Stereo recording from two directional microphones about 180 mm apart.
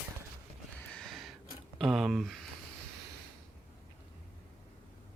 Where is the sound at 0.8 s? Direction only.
5° left (ahead or behind).